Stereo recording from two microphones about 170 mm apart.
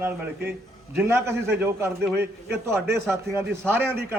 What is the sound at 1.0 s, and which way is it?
A man's voice, 15° right (ahead or behind).